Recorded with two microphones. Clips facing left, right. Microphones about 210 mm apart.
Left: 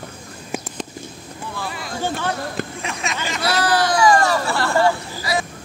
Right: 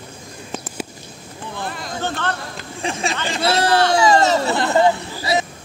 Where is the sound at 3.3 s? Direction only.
25° right (ahead or behind).